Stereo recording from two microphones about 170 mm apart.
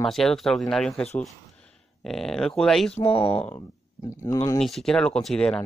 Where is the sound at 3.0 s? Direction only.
35° left (ahead or behind).